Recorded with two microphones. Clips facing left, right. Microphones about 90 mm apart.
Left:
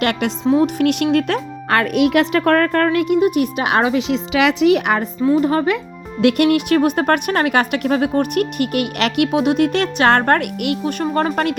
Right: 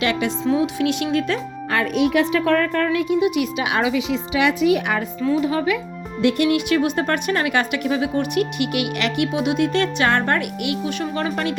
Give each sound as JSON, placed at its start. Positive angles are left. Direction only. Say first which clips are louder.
{"t": 0.0, "sound": "a woman's voice", "louder": "left 2 dB", "side_deg": 55}
{"t": 4.4, "sound": "speech", "louder": "left 4 dB", "side_deg": 80}
{"t": 5.3, "sound": "a woman's voice", "louder": "left 4 dB", "side_deg": 45}
{"t": 6.2, "sound": "a woman's voice", "louder": "left 4 dB", "side_deg": 60}